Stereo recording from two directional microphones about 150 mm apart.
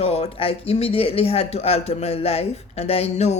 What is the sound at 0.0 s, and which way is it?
Speech, 45° left (ahead or behind).